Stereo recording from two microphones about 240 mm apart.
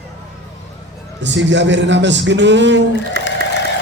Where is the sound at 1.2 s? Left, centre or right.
Right.